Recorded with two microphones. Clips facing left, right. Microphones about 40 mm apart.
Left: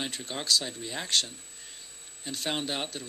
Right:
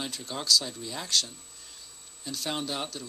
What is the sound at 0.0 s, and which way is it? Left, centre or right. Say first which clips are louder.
Speech: even; left.